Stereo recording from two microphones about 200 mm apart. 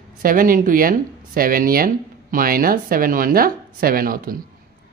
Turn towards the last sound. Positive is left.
turn(degrees=-45)  # may be behind; listen again after turning